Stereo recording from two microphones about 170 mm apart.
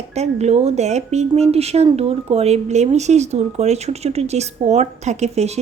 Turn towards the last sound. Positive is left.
turn(degrees=-40)  # may be behind; listen again after turning